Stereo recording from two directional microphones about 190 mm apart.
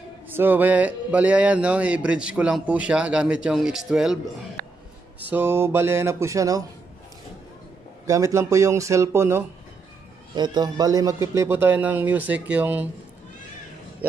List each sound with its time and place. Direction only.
0.3 s speech: 10° right (ahead or behind)
5.2 s speech: 10° right (ahead or behind)
8.1 s speech: 15° right (ahead or behind)